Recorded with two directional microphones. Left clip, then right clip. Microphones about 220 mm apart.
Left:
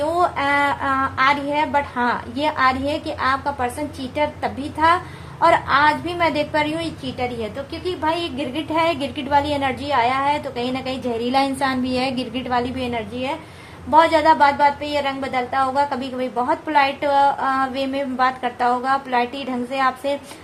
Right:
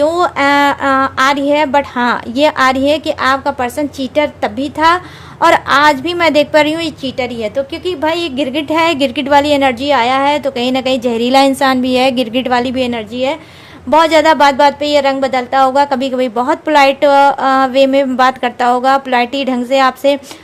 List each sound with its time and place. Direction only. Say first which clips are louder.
0.0 s a woman's voice: right 8 dB; 50° right (ahead or behind)